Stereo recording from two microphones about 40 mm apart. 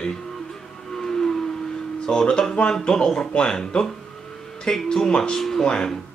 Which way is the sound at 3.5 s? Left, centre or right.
Centre.